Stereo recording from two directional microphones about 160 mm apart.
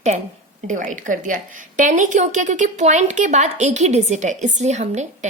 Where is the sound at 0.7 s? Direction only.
50° right (ahead or behind).